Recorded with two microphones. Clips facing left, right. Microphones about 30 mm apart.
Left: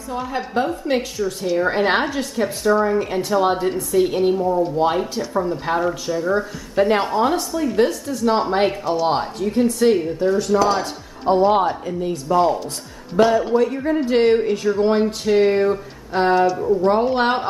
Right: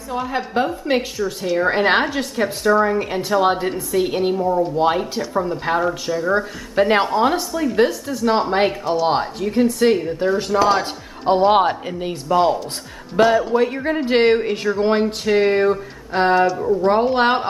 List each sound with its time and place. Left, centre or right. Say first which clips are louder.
0.1 s a woman's voice: right 1 dB; centre
6.2 s speech: right 2 dB; right
7.1 s a woman's voice: right 1 dB; centre
10.0 s speech: left 1 dB; right
10.8 s speech: right 1 dB; right
12.3 s speech: right 1 dB; right
13.2 s speech: even; right
14.8 s a woman's voice: even; right
16.4 s speech: even; centre
16.8 s a woman's voice: right 2 dB; centre